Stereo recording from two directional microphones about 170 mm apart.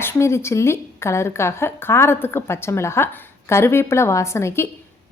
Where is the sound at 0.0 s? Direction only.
15° left (ahead or behind).